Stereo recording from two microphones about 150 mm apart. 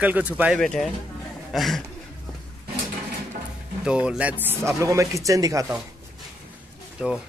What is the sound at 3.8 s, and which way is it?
Speech, 5° right (ahead or behind).